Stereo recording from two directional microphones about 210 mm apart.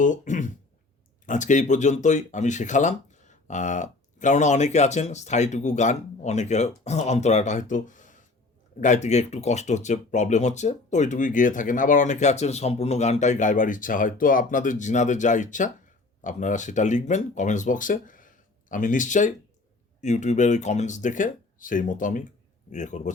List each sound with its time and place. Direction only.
0.0 s speech: 35° left (ahead or behind)